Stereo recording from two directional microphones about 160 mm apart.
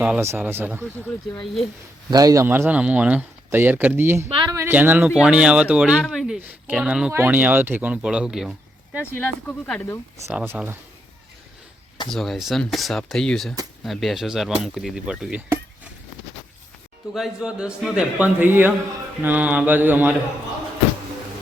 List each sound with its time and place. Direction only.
0.0 s speech: 10° right (ahead or behind)
2.0 s speech: 25° right (ahead or behind)
4.3 s speech: 30° right (ahead or behind)
4.5 s speech: 10° right (ahead or behind)
9.1 s speech: 5° left (ahead or behind)
10.3 s speech: 10° right (ahead or behind)
12.0 s speech: centre (ahead or behind)
17.2 s speech: 5° right (ahead or behind)